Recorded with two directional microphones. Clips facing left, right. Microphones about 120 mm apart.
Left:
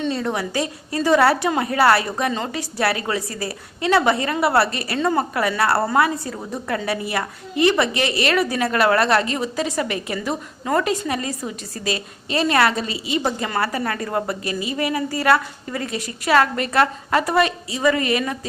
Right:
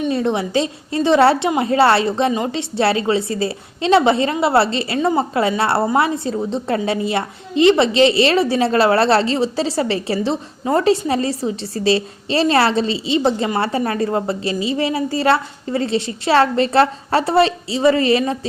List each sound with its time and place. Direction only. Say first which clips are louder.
0.1 s a woman's voice: right 5 dB; 20° right (ahead or behind)